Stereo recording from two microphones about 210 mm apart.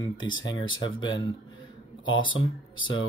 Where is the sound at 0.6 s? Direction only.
20° left (ahead or behind).